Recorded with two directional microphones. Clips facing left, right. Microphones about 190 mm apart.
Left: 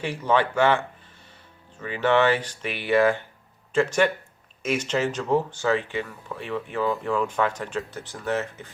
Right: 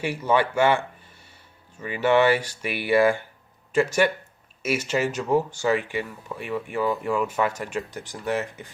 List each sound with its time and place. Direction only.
0.0 s speech: 10° right (ahead or behind)